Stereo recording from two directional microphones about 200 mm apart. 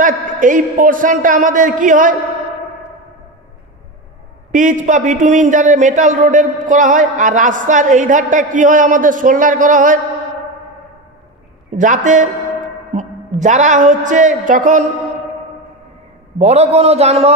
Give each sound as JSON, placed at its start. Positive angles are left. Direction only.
{"t": 0.0, "sound": "a man's voice", "side_deg": -40}
{"t": 4.5, "sound": "a man's voice", "side_deg": -40}
{"t": 11.7, "sound": "a man's voice", "side_deg": -40}
{"t": 16.3, "sound": "a man's voice", "side_deg": -30}